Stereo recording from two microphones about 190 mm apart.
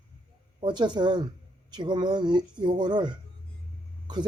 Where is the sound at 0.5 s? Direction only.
25° right (ahead or behind).